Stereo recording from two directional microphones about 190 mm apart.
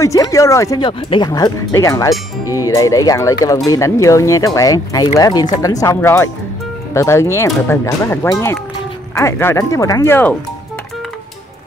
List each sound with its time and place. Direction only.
0.0 s speech: 15° left (ahead or behind)